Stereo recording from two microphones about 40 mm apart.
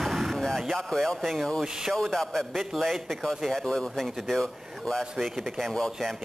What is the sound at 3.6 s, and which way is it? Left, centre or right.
Speech, centre.